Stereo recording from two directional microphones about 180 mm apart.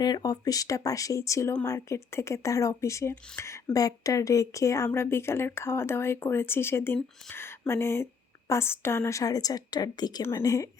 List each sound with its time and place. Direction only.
0.0 s speech: 20° left (ahead or behind)